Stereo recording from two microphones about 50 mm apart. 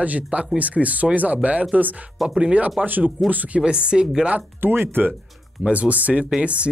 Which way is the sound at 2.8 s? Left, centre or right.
Right.